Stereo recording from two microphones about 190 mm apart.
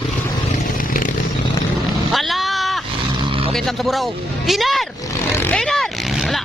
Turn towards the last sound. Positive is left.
turn(degrees=0)  # may be behind; listen again after turning